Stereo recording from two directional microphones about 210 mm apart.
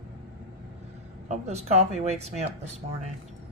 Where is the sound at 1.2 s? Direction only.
30° right (ahead or behind).